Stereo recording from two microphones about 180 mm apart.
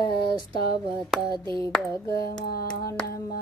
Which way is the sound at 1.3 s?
25° right (ahead or behind).